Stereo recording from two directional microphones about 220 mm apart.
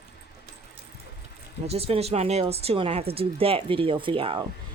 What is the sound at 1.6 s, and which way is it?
Speech, 25° right (ahead or behind).